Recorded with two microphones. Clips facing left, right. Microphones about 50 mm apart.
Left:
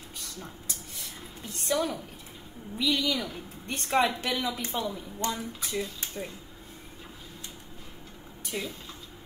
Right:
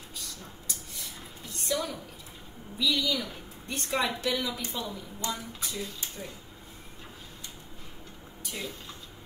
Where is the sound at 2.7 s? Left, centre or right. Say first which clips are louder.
Left 1 dB; left.